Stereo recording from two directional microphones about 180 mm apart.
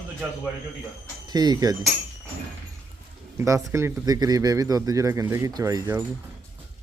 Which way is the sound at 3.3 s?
15° right (ahead or behind).